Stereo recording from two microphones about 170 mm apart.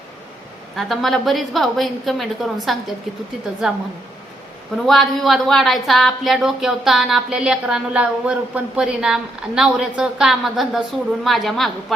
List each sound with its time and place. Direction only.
0.8 s speech: centre (ahead or behind)
4.9 s speech: centre (ahead or behind)